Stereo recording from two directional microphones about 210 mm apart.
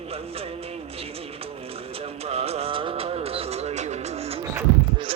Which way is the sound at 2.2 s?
30° right (ahead or behind).